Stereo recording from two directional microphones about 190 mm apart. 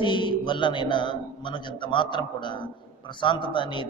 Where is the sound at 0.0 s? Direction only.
25° left (ahead or behind).